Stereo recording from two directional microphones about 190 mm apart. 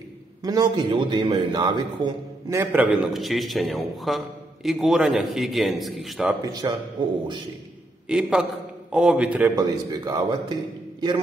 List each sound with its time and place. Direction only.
0.4 s a man's voice: 20° right (ahead or behind); by 6.3 s centre (ahead or behind)
6.4 s speech: 20° right (ahead or behind)
8.1 s a man's voice: 5° right (ahead or behind)
9.6 s speech: 20° right (ahead or behind)